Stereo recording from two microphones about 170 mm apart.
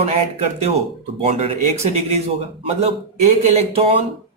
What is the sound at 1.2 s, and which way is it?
Speech, 40° right (ahead or behind).